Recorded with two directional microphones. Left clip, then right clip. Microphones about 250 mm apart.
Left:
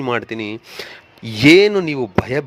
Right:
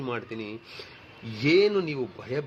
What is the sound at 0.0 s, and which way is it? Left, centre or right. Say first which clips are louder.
A man's voice: left 12 dB; left.